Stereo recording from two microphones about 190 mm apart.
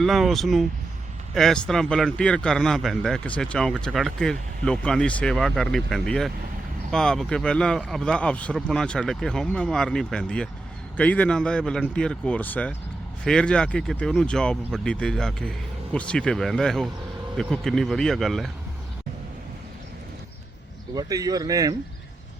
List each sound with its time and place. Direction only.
0.0 s a man's voice: centre (ahead or behind)
20.9 s speech: 20° right (ahead or behind)